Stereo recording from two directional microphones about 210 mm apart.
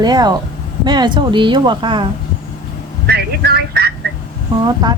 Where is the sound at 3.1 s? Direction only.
50° right (ahead or behind).